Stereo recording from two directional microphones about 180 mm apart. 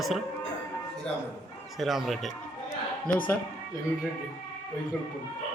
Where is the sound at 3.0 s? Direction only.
50° left (ahead or behind).